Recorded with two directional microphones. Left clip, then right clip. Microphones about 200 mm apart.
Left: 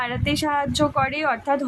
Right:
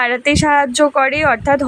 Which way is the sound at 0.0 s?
25° right (ahead or behind).